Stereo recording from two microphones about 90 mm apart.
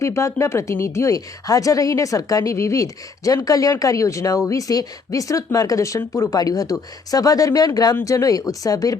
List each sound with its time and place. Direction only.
0.0 s a woman's voice: 35° left (ahead or behind)